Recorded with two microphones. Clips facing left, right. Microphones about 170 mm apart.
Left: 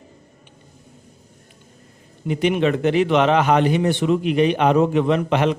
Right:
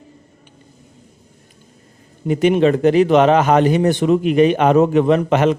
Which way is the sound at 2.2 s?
45° right (ahead or behind).